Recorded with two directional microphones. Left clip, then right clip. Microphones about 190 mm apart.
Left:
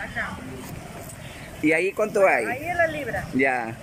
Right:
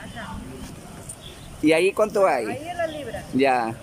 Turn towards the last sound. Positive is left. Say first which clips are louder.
# right 3 dB
turn(degrees=-10)  # may be behind; listen again after turning